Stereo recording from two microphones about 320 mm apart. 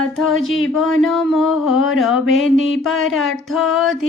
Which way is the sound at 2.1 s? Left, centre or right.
Left.